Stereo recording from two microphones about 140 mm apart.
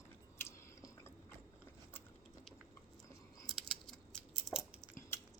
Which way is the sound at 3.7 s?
5° left (ahead or behind).